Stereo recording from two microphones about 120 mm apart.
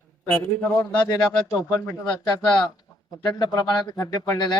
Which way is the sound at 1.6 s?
25° left (ahead or behind).